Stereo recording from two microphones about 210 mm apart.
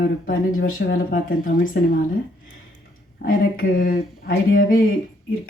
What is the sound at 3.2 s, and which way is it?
Speech, 40° left (ahead or behind).